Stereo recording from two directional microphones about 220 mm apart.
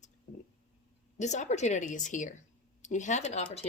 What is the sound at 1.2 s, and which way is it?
Speech, 30° left (ahead or behind).